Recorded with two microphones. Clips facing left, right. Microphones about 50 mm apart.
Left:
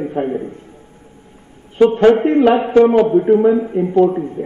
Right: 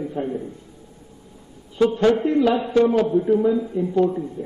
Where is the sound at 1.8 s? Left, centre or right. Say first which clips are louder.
Left 7 dB; left.